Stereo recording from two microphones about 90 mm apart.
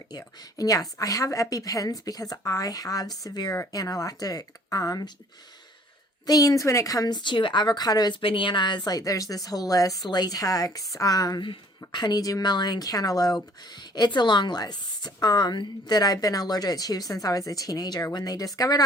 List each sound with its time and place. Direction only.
0.1 s a woman's voice: 45° left (ahead or behind)
6.2 s a woman's voice: 40° left (ahead or behind)
7.2 s speech: 60° left (ahead or behind); by 8.1 s 45° left (ahead or behind)
8.2 s a woman's voice: 75° left (ahead or behind); by 18.8 s 45° left (ahead or behind)